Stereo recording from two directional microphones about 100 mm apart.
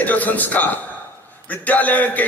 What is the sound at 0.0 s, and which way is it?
A man's voice, 15° left (ahead or behind).